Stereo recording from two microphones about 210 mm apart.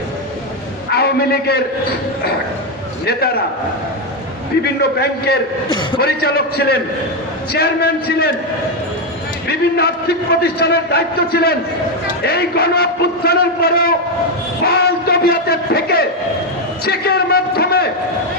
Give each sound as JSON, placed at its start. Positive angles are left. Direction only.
{"t": 0.9, "sound": "a man's voice", "side_deg": 50}
{"t": 4.6, "sound": "a man's voice", "side_deg": 50}
{"t": 9.5, "sound": "a man's voice", "side_deg": 50}
{"t": 16.8, "sound": "a sound", "side_deg": 45}